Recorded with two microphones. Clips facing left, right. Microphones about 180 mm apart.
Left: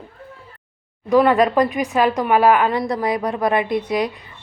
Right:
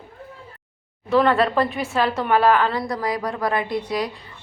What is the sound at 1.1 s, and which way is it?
A woman's voice, 15° left (ahead or behind).